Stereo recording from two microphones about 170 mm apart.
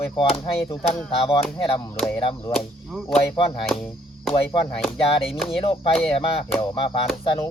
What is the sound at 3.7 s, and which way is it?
Speech, centre (ahead or behind).